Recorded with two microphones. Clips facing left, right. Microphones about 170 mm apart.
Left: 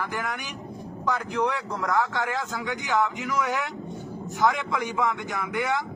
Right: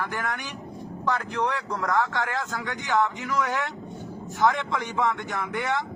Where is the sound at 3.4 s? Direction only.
15° left (ahead or behind).